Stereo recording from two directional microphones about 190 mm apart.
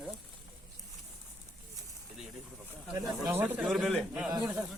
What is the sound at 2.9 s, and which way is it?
Speech, 15° right (ahead or behind).